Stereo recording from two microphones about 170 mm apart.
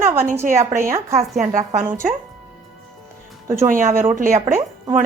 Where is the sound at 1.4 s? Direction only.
45° right (ahead or behind).